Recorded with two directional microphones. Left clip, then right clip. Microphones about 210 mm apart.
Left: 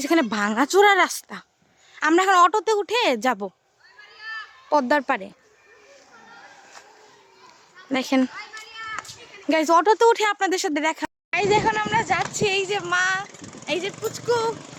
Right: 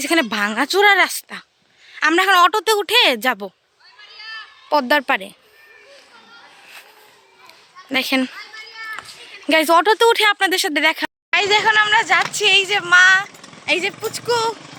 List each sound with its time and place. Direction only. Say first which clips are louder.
0.0 s a woman's voice: right 3 dB; 10° left (ahead or behind)
4.2 s a sound: right 1 dB; 55° left (ahead or behind)
4.7 s speech: right 4 dB; 5° left (ahead or behind)
7.9 s a woman's voice: right 4 dB; 15° left (ahead or behind)
9.5 s speech: right 4 dB; centre (ahead or behind)